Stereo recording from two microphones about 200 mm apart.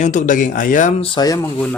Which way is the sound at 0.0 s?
40° left (ahead or behind).